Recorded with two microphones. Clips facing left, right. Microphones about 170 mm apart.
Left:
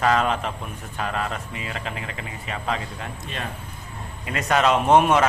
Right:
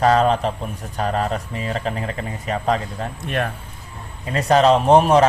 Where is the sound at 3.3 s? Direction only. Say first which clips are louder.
Right 10 dB; 60° right (ahead or behind).